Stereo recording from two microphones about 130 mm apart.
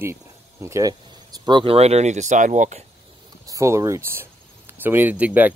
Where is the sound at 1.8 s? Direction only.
55° right (ahead or behind); by 2.8 s 70° right (ahead or behind).